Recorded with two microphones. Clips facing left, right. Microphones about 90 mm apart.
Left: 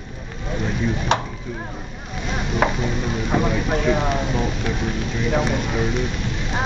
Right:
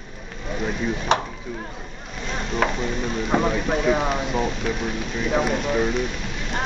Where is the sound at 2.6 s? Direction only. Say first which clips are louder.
Left 3 dB; 5° left (ahead or behind).